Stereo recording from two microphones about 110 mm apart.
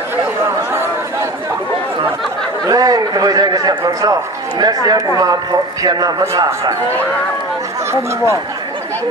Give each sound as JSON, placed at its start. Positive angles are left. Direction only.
{"t": 2.6, "sound": "a man's voice", "side_deg": -35}